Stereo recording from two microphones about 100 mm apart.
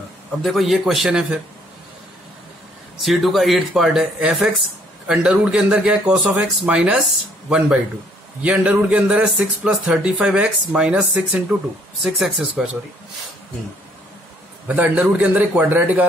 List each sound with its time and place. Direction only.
0.4 s speech: centre (ahead or behind)
3.0 s speech: centre (ahead or behind)
14.7 s speech: 15° right (ahead or behind)